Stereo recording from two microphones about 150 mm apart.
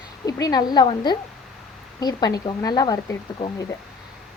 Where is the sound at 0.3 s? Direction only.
25° left (ahead or behind).